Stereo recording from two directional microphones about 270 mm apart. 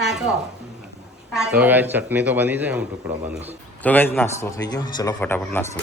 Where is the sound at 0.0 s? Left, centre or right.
Centre.